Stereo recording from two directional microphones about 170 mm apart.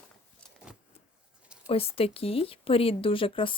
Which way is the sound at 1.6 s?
35° left (ahead or behind).